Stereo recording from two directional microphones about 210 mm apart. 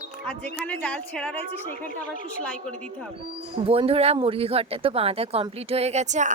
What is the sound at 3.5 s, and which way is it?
Speech, 25° right (ahead or behind).